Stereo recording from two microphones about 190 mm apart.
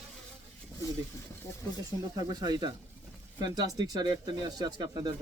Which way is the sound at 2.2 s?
20° right (ahead or behind).